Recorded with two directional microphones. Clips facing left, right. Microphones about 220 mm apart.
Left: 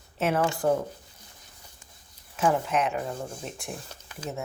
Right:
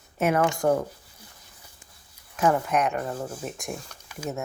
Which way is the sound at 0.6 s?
70° right (ahead or behind).